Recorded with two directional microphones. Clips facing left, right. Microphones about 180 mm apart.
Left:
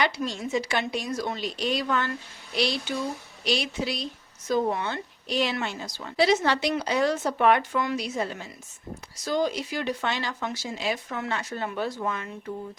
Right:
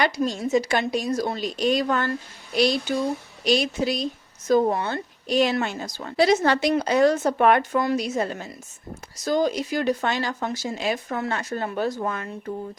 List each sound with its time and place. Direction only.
0.0 s speech: 40° right (ahead or behind)
3.4 s speech: 45° right (ahead or behind)